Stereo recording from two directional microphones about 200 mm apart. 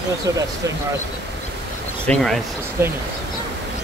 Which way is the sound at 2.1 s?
Centre (ahead or behind).